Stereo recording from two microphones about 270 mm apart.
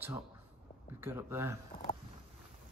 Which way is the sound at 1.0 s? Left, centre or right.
Centre.